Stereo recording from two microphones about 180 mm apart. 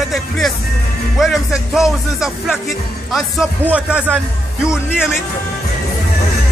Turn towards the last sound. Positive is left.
turn(degrees=-5)  # may be behind; listen again after turning